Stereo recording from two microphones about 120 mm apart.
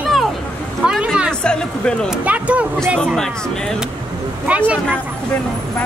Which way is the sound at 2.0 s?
10° right (ahead or behind).